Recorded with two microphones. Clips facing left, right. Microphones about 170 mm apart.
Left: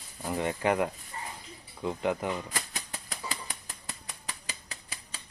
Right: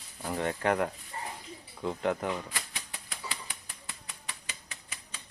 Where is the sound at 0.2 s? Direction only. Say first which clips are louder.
Left 1 dB; 10° left (ahead or behind).